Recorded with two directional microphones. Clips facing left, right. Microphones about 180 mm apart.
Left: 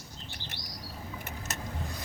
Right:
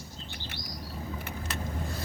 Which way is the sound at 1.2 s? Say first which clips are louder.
Right 2 dB; 45° left (ahead or behind).